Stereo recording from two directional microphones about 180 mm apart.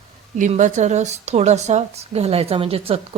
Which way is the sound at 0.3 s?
45° right (ahead or behind).